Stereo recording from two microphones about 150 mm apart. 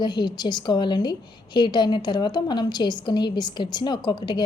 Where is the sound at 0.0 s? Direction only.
30° left (ahead or behind).